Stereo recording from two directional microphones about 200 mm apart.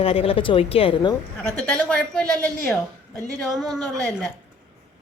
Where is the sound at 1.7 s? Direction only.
5° left (ahead or behind).